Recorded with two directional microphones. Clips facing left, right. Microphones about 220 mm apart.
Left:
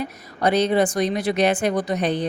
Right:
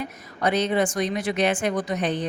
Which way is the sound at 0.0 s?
35° left (ahead or behind).